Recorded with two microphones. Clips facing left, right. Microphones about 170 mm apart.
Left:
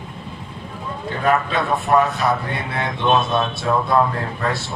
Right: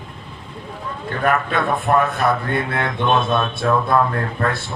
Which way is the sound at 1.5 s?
55° right (ahead or behind).